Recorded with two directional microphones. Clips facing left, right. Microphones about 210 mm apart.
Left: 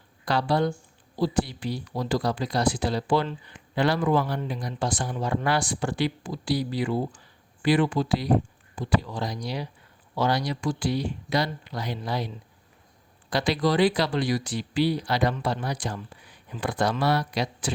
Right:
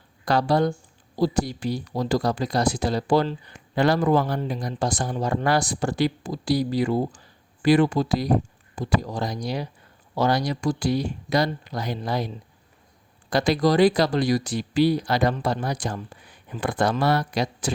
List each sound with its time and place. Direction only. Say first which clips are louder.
0.3 s speech: right 3 dB; 45° right (ahead or behind)
13.3 s speech: right 4 dB; 45° right (ahead or behind)